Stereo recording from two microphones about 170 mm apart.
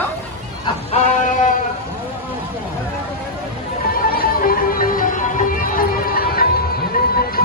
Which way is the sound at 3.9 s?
60° left (ahead or behind).